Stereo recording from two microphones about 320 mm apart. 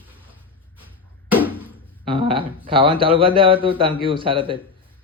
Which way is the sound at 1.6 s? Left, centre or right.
Centre.